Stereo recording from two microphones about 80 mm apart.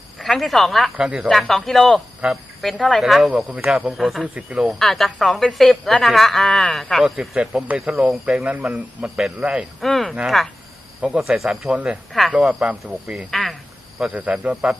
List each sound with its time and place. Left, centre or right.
0.2 s speech: centre
0.9 s speech: centre
1.3 s a woman's voice: centre
4.4 s speech: centre
4.8 s a woman's voice: centre
7.0 s speech: centre
9.0 s speech: centre
9.8 s a woman's voice: centre
13.3 s a woman's voice: centre
14.0 s speech: centre